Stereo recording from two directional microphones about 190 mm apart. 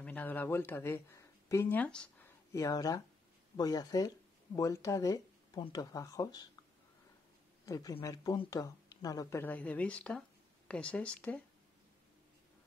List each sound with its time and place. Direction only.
0.0 s speech: 10° left (ahead or behind)
2.5 s speech: 15° left (ahead or behind)
7.6 s speech: 15° left (ahead or behind)